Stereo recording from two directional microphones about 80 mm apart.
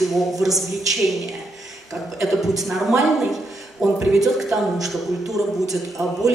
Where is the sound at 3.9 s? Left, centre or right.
Centre.